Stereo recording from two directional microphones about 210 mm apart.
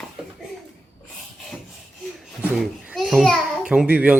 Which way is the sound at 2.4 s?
5° right (ahead or behind).